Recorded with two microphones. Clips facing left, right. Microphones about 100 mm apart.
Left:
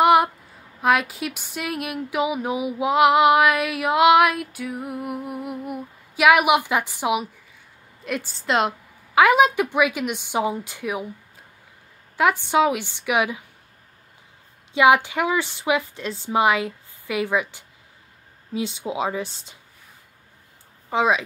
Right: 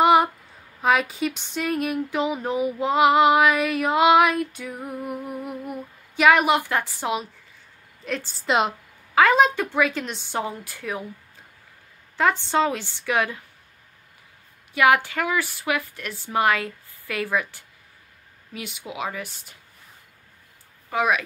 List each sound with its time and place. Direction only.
0.0 s a sound: centre (ahead or behind)
0.8 s a woman's voice: centre (ahead or behind)
8.4 s a woman's voice: centre (ahead or behind); by 11.1 s 15° left (ahead or behind)
12.2 s a woman's voice: 10° left (ahead or behind)
14.7 s a woman's voice: 20° left (ahead or behind)
20.9 s a woman's voice: 25° left (ahead or behind)